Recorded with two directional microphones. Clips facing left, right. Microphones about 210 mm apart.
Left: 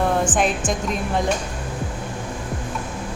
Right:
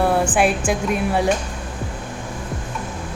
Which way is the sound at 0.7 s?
10° right (ahead or behind).